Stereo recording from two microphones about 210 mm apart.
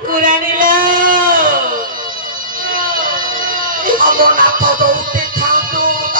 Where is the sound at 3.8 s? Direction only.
40° right (ahead or behind).